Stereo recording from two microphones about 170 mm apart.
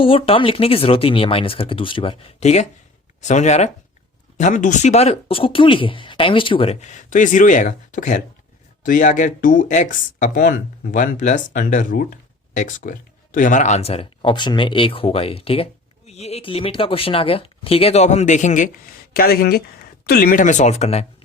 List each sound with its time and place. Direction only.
0.0 s speech: 30° left (ahead or behind)
6.8 s speech: 45° left (ahead or behind)
19.1 s speech: 60° left (ahead or behind); by 21.1 s 40° left (ahead or behind)